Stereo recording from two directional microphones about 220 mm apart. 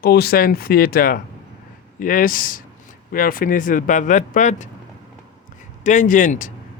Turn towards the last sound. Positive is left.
turn(degrees=35)  # may be behind; listen again after turning